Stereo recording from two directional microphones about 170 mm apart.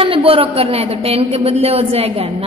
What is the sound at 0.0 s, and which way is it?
A woman's voice, 35° right (ahead or behind).